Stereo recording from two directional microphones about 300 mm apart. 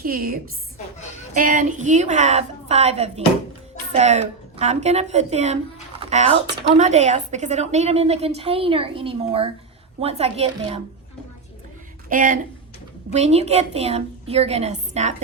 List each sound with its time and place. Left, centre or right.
0.0 s a woman's voice: right
1.4 s a woman's voice: right
12.0 s a woman's voice: right